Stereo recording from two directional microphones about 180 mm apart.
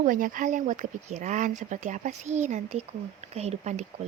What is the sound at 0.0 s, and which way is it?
Speech, 50° right (ahead or behind).